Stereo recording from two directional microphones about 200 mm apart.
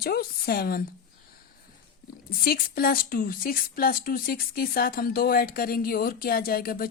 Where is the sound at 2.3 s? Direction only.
50° left (ahead or behind).